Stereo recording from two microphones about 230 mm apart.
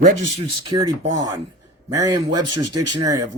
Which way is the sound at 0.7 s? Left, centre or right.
Centre.